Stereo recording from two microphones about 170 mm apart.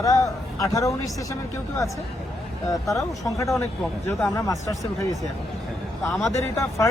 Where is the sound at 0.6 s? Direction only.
20° left (ahead or behind).